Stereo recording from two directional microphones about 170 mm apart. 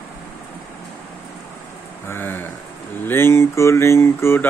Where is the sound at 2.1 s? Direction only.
10° left (ahead or behind).